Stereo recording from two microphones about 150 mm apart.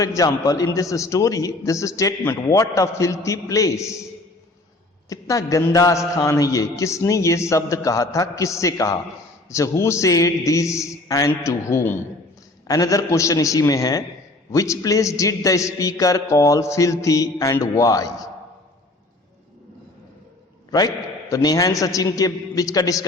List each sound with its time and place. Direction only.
0.0 s a man's voice: 25° left (ahead or behind)
5.0 s a man's voice: 20° left (ahead or behind)
20.7 s a man's voice: 25° left (ahead or behind)